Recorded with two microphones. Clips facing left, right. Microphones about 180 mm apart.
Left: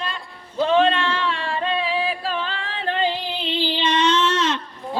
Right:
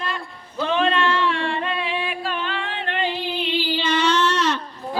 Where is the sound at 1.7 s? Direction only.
30° left (ahead or behind).